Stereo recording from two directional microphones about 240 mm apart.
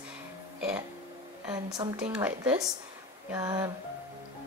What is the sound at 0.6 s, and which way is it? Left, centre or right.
Speech, centre.